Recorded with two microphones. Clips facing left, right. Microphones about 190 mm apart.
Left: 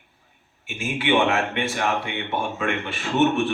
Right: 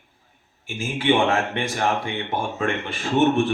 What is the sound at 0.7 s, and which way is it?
Speech, 35° right (ahead or behind).